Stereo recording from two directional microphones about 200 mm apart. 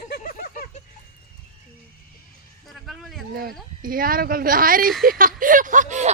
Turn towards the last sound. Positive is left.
turn(degrees=-40)  # may be behind; listen again after turning